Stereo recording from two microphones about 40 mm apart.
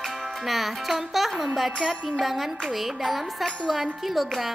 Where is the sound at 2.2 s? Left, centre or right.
Centre.